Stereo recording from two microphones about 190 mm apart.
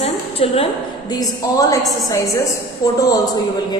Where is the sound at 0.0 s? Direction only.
30° left (ahead or behind).